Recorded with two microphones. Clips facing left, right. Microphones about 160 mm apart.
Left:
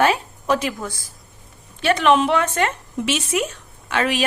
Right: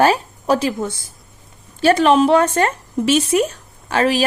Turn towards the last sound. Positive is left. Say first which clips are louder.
# right 4 dB
turn(degrees=-35)  # may be behind; listen again after turning